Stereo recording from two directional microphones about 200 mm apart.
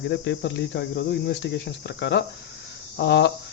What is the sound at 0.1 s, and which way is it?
Speech, 60° left (ahead or behind).